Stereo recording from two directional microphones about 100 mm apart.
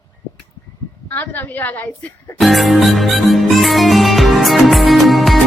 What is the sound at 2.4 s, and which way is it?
Music, centre (ahead or behind).